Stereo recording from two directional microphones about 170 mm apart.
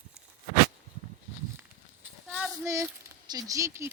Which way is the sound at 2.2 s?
Centre (ahead or behind).